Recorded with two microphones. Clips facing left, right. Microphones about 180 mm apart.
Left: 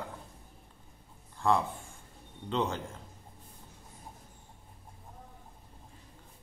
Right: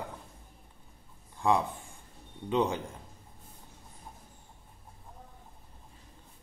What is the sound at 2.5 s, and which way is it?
Speech, 15° right (ahead or behind).